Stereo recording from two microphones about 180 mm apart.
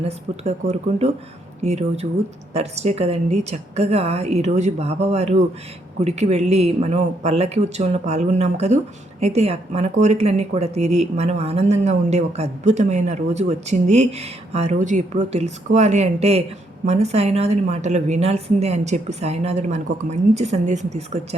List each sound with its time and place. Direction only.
0.0 s speech: 40° right (ahead or behind)